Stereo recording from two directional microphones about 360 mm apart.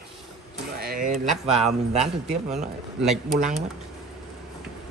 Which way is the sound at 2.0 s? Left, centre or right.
Centre.